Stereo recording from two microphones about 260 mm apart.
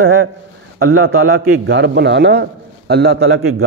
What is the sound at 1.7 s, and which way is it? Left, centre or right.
Speech, right.